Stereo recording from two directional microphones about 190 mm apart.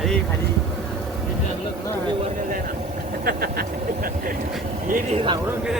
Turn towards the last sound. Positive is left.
turn(degrees=-35)  # may be behind; listen again after turning